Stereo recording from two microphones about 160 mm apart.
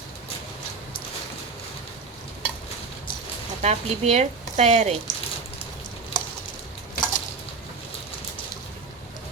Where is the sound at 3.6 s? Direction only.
40° right (ahead or behind).